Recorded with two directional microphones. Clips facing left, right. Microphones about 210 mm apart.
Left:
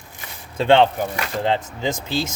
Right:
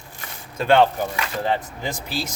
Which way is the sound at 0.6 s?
25° left (ahead or behind).